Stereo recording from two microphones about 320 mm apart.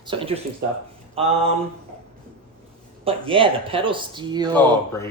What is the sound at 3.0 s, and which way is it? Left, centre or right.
Speech, centre.